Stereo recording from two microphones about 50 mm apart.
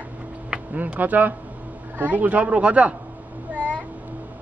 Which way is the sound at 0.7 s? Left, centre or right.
Right.